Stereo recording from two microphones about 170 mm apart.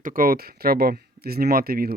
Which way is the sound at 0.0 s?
55° right (ahead or behind).